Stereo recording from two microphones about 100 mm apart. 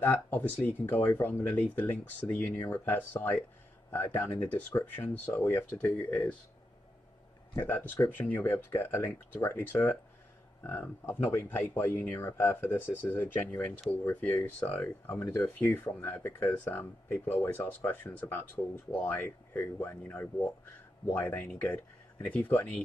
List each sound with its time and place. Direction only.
0.0 s speech: 20° left (ahead or behind)
7.6 s speech: 20° left (ahead or behind)